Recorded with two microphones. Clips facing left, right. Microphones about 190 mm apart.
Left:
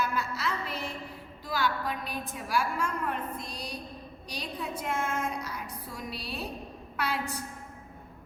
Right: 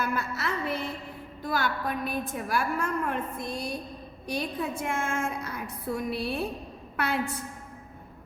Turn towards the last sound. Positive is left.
turn(degrees=-55)  # may be behind; listen again after turning